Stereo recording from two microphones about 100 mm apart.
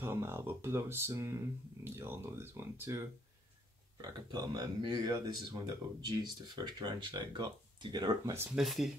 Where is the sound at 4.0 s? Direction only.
40° right (ahead or behind).